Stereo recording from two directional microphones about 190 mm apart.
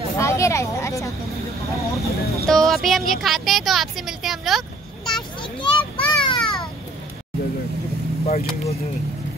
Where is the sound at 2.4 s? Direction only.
Centre (ahead or behind).